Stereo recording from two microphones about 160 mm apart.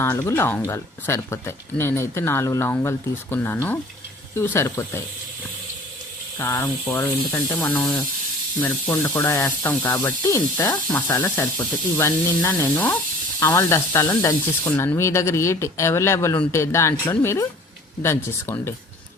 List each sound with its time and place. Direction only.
0.0 s speech: 15° left (ahead or behind)
6.4 s speech: 15° left (ahead or behind)
7.7 s speech: 5° left (ahead or behind)